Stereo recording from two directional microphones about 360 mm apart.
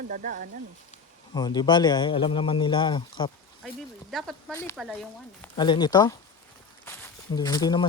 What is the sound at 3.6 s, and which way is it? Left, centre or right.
Speech, centre.